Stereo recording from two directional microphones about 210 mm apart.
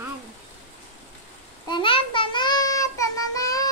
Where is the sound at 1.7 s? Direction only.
25° left (ahead or behind).